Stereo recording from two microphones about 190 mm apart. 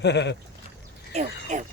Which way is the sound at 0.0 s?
65° left (ahead or behind).